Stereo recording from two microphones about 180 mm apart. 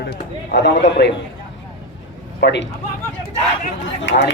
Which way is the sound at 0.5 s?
70° left (ahead or behind).